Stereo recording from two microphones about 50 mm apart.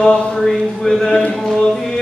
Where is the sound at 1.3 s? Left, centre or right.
Centre.